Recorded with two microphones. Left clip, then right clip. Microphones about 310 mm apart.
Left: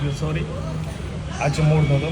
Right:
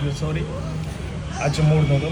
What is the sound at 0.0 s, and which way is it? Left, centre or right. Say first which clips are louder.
Speech: even; centre.